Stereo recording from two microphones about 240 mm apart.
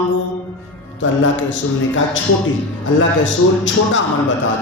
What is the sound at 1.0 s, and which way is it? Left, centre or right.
Speech, left.